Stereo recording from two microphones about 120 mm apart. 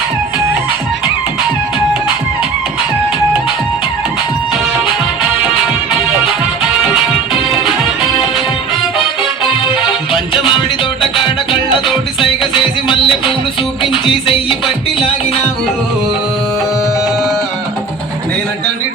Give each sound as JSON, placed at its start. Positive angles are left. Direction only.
{"t": 9.4, "sound": "music", "side_deg": 45}
{"t": 12.9, "sound": "music", "side_deg": 45}